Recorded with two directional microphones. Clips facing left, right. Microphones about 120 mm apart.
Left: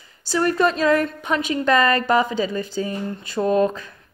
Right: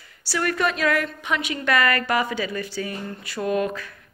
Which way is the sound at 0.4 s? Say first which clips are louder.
Left 4 dB; 30° left (ahead or behind).